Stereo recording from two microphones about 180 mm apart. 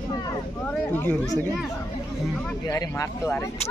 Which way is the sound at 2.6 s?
20° left (ahead or behind).